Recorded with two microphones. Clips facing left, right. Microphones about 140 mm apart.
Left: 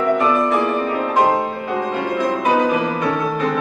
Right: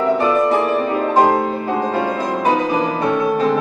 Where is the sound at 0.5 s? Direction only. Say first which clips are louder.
Right 2 dB; 35° right (ahead or behind).